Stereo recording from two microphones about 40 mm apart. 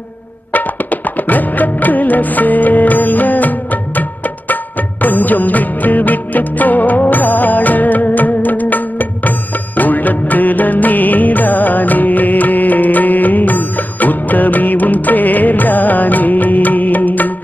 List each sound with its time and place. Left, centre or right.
1.2 s music: left
5.0 s music: left